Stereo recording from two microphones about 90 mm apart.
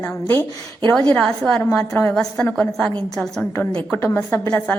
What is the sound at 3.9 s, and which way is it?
Speech, 25° left (ahead or behind).